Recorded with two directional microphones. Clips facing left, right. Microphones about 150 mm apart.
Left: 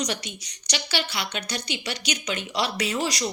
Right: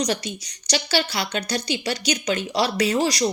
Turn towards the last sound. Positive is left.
turn(degrees=-35)  # may be behind; listen again after turning